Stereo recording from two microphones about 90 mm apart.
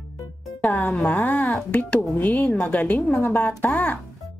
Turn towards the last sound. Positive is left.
turn(degrees=20)  # may be behind; listen again after turning